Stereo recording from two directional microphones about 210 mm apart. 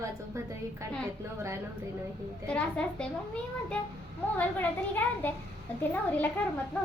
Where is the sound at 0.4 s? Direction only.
15° right (ahead or behind).